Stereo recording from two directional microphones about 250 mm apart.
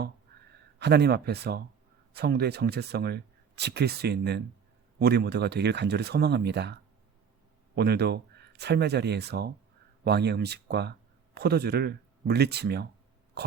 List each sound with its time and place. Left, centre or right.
0.8 s speech: right
7.8 s speech: right